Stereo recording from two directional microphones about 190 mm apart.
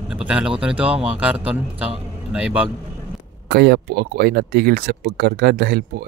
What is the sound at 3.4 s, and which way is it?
Speech, 60° right (ahead or behind).